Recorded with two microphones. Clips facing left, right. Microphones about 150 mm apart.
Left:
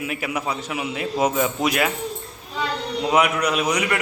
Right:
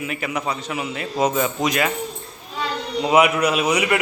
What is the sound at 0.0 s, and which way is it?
A man's voice, 5° left (ahead or behind).